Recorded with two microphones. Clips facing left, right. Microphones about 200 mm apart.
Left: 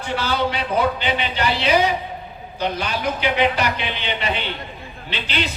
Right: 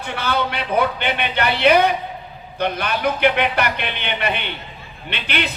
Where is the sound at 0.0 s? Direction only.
60° right (ahead or behind).